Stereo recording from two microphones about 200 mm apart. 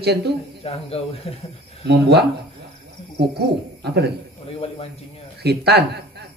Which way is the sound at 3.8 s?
55° right (ahead or behind).